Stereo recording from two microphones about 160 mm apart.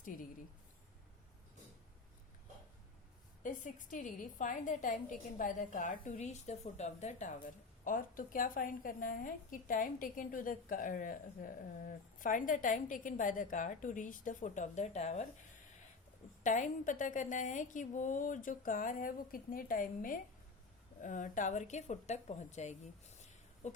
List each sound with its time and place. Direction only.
3.4 s a woman's voice: 55° left (ahead or behind)
16.4 s a woman's voice: 50° left (ahead or behind)